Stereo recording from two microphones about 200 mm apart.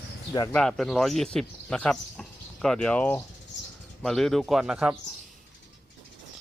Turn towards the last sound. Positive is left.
turn(degrees=-5)  # may be behind; listen again after turning